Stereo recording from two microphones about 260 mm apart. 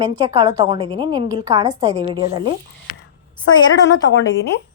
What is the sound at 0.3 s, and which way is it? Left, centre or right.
A woman's voice, centre.